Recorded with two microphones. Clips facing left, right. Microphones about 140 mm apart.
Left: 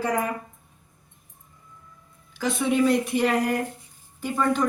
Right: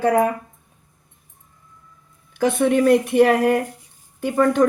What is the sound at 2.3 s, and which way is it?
Speech, 55° right (ahead or behind).